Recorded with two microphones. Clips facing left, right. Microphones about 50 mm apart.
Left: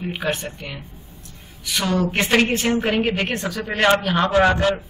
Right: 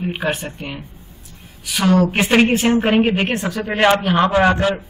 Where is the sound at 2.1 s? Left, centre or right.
Centre.